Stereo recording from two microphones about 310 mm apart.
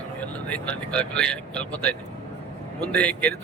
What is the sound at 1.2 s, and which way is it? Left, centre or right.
Speech, centre.